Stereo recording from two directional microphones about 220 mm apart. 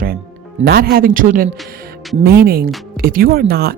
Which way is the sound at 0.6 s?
45° right (ahead or behind).